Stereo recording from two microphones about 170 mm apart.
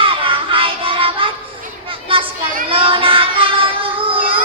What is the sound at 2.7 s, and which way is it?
Child singing, 30° right (ahead or behind).